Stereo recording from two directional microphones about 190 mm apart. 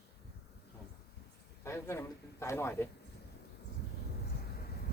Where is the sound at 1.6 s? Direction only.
15° left (ahead or behind).